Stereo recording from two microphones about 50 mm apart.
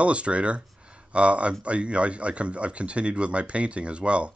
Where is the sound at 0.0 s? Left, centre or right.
Right.